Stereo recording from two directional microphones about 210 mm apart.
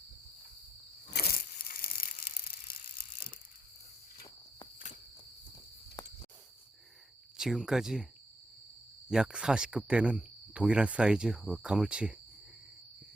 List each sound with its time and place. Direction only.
1.1 s crushing: 45° left (ahead or behind)
6.0 s cricket: 20° left (ahead or behind)
7.3 s speech: centre (ahead or behind)
9.0 s speech: 5° right (ahead or behind)